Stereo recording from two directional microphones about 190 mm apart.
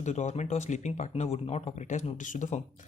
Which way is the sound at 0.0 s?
40° left (ahead or behind).